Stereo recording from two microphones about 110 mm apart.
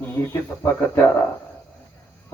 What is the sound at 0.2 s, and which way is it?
Speech, 20° left (ahead or behind).